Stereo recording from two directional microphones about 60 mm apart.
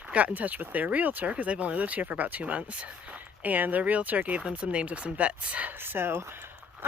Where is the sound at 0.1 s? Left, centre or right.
Right.